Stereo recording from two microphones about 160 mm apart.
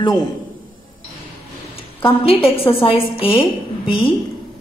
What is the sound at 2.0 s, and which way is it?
Speech, 35° left (ahead or behind).